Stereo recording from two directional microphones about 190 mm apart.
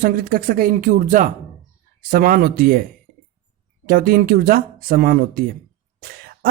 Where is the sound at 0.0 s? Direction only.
50° right (ahead or behind).